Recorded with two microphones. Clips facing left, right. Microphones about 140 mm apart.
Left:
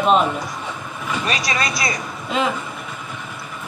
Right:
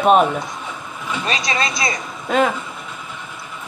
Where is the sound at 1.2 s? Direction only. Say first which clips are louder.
Right 2 dB; 25° right (ahead or behind).